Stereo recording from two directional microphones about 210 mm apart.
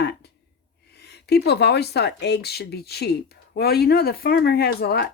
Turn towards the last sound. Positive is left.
turn(degrees=50)  # may be behind; listen again after turning